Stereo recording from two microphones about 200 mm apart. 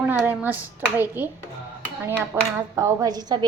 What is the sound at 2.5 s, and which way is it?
Speech, 15° right (ahead or behind).